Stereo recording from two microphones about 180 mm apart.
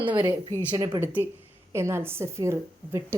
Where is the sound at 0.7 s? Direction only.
20° right (ahead or behind).